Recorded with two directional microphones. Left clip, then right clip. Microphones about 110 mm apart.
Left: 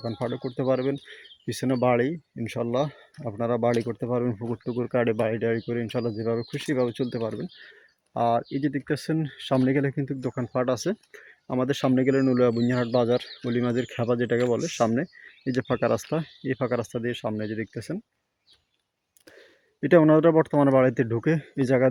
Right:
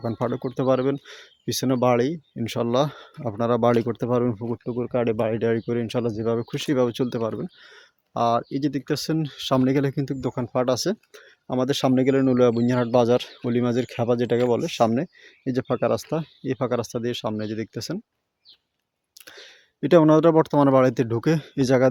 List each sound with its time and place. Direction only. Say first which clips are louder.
0.0 s speech: right 4 dB; 45° right (ahead or behind)
2.4 s speech: right 4 dB; 55° right (ahead or behind)
4.4 s speech: right 2 dB; 10° right (ahead or behind)
5.3 s speech: right 3 dB; 35° right (ahead or behind)
15.5 s speech: right 2 dB; 10° right (ahead or behind)
16.0 s speech: right 1 dB; 5° left (ahead or behind)
16.4 s speech: right 3 dB; 20° right (ahead or behind)
19.3 s speech: right 6 dB; 20° right (ahead or behind)